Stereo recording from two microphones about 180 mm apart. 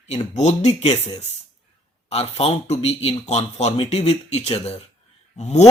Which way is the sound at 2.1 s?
35° left (ahead or behind).